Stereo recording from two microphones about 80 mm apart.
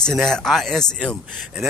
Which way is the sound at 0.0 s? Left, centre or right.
Centre.